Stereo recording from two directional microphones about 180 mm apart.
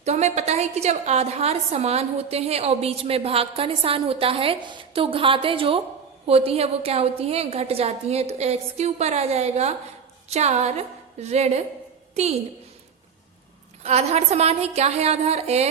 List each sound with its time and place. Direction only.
0.0 s a woman's voice: 40° right (ahead or behind)
13.8 s a woman's voice: 35° right (ahead or behind)